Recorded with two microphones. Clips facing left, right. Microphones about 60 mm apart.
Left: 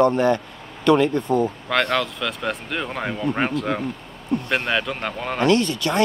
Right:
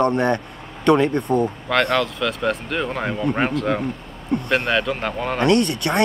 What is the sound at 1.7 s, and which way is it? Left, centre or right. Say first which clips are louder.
Speech: right 3 dB; centre.